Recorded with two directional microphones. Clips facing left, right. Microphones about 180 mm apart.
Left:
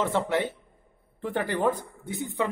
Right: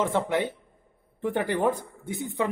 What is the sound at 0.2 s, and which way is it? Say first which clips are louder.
Speech: even; 15° right (ahead or behind).